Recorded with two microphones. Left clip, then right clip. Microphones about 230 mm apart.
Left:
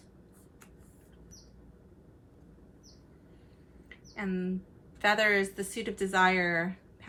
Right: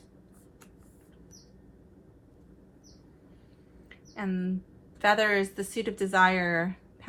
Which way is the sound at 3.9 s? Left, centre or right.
Right.